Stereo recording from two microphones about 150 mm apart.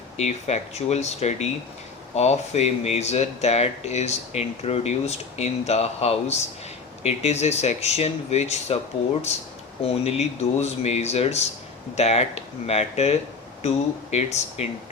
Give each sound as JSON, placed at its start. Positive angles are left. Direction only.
{"t": 0.2, "sound": "speech", "side_deg": 50}
{"t": 9.8, "sound": "speech", "side_deg": 45}